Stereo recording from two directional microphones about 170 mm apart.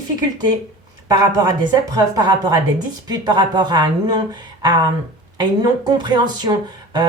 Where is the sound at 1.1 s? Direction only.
25° right (ahead or behind).